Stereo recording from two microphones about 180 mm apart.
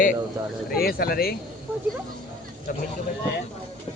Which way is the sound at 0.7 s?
55° left (ahead or behind).